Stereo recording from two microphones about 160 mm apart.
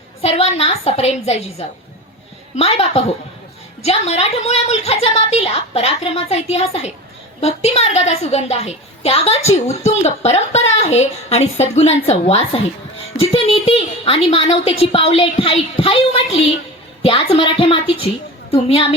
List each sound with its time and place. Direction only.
0.2 s a woman's voice: 40° left (ahead or behind)